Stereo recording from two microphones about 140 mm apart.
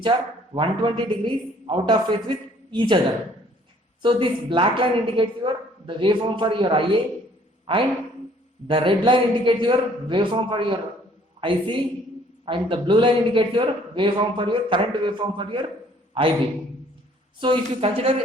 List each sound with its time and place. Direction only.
0.1 s a man's voice: 35° right (ahead or behind)
4.0 s a man's voice: 35° right (ahead or behind)
17.4 s a man's voice: 40° right (ahead or behind)